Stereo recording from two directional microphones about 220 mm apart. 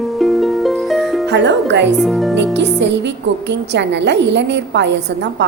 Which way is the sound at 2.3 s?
50° right (ahead or behind).